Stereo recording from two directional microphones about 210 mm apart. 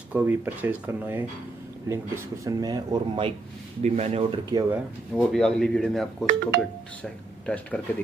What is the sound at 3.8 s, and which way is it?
Speech, 30° right (ahead or behind).